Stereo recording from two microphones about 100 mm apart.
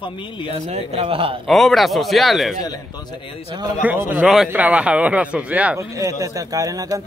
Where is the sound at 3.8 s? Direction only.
20° right (ahead or behind).